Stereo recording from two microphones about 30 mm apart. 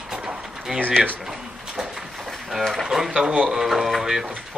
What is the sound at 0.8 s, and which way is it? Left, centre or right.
Speech, right.